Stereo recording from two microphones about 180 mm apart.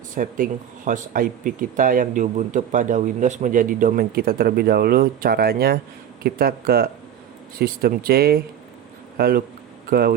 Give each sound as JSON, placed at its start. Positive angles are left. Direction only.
{"t": 0.1, "sound": "speech", "side_deg": -50}